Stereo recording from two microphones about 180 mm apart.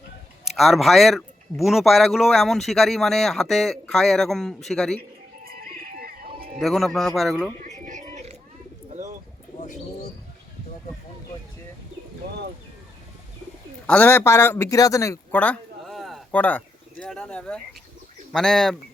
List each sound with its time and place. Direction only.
0.5 s speech: centre (ahead or behind)
5.5 s music: 55° right (ahead or behind)
6.6 s speech: centre (ahead or behind)
7.6 s a sound: 45° right (ahead or behind)
13.8 s a man's voice: 10° left (ahead or behind)